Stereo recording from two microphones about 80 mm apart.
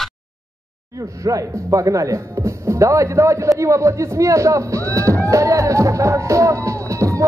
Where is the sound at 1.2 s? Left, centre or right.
Right.